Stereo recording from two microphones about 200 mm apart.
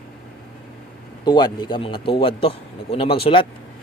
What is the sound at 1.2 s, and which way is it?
Speech, 20° left (ahead or behind).